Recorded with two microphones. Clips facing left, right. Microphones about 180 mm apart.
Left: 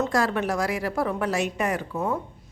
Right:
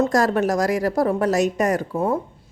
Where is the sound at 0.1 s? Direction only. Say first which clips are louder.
Right 5 dB; 40° right (ahead or behind).